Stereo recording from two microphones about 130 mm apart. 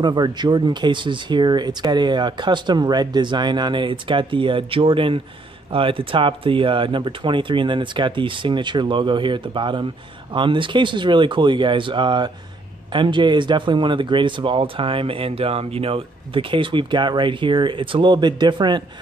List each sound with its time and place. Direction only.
0.0 s speech: 35° right (ahead or behind)